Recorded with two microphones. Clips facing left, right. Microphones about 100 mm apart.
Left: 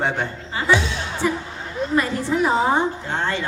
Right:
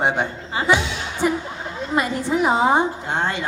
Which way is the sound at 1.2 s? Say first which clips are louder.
Right 3 dB; 20° right (ahead or behind).